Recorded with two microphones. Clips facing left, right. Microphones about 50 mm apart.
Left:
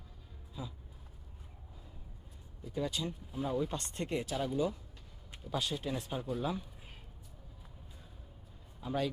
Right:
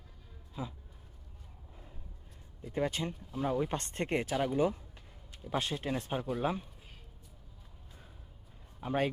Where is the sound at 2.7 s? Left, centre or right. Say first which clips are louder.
Right 3 dB; right.